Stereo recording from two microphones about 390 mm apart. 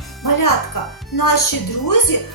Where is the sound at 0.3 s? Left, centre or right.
Left.